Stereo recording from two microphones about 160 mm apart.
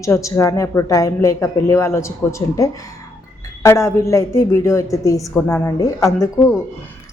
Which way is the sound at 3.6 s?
15° left (ahead or behind).